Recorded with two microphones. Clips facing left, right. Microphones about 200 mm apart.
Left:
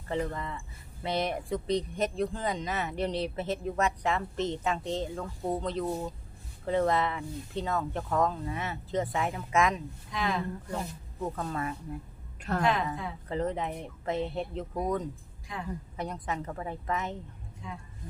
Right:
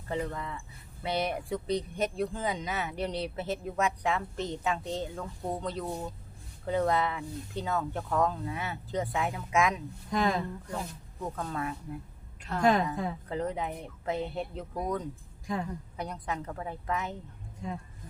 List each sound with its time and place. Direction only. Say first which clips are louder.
0.1 s speech: left 1 dB; centre (ahead or behind)
10.1 s a woman's voice: right 4 dB; 45° right (ahead or behind)
10.7 s speech: left 1 dB; centre (ahead or behind)
12.4 s a sound: left 4 dB; 60° left (ahead or behind)
12.6 s a woman's voice: right 6 dB; 45° right (ahead or behind)
13.2 s speech: left 6 dB; centre (ahead or behind)
15.5 s a woman's voice: right 7 dB; 45° right (ahead or behind)
16.0 s speech: left 1 dB; centre (ahead or behind)
17.6 s a woman's voice: right 5 dB; 45° right (ahead or behind)